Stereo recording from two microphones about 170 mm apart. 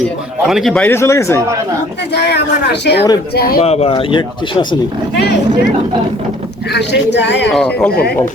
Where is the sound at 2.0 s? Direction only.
80° left.